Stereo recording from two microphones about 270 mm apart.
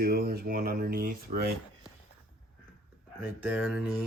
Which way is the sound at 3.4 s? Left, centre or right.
Centre.